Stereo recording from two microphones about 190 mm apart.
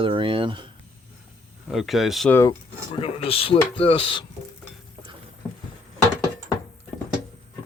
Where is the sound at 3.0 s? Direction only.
30° left (ahead or behind).